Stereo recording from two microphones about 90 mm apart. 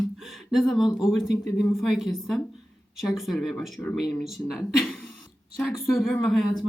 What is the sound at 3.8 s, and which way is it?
Speech, 30° left (ahead or behind).